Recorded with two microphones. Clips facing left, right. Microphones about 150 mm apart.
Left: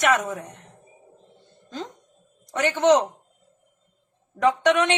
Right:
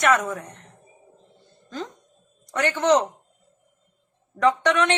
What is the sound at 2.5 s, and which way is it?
Speech, 15° left (ahead or behind).